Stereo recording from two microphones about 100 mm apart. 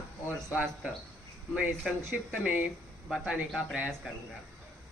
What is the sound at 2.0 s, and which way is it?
Speech, 25° right (ahead or behind).